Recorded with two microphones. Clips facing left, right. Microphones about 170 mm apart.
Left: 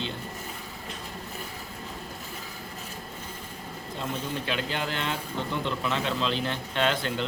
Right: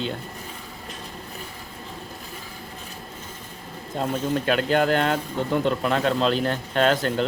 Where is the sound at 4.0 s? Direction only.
50° right (ahead or behind).